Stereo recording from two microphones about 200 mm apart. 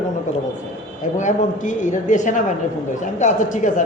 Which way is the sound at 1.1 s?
40° left (ahead or behind).